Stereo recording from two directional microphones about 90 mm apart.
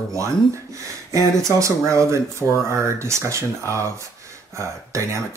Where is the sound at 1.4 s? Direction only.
35° right (ahead or behind).